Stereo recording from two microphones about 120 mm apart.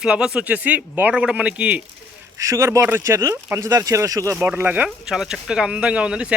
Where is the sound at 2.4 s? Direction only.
25° right (ahead or behind).